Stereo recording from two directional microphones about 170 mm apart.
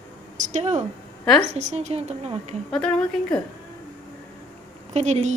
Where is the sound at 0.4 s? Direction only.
45° right (ahead or behind).